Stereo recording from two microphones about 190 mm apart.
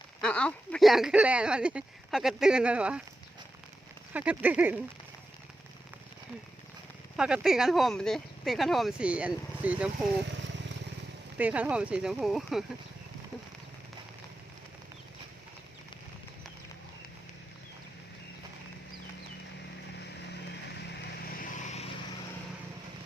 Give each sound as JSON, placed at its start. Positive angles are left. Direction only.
{"t": 0.2, "sound": "speech", "side_deg": 5}
{"t": 4.1, "sound": "speech", "side_deg": -10}
{"t": 7.2, "sound": "speech", "side_deg": -5}
{"t": 11.3, "sound": "speech", "side_deg": -10}
{"t": 21.3, "sound": "vehicle", "side_deg": 35}